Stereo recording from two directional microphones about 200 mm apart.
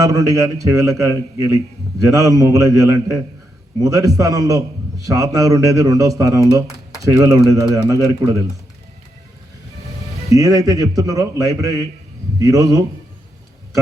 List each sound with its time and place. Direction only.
0.0 s a man's voice: 15° right (ahead or behind)
10.2 s a man's voice: 15° right (ahead or behind)